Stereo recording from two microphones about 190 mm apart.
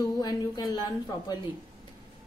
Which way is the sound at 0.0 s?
20° left (ahead or behind).